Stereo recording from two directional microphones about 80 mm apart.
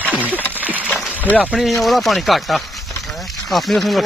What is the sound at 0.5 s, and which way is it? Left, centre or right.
Speech, right.